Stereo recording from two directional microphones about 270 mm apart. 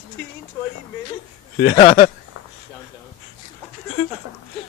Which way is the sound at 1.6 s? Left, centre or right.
Left.